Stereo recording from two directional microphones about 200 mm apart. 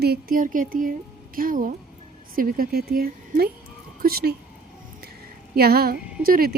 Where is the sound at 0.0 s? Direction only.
50° right (ahead or behind).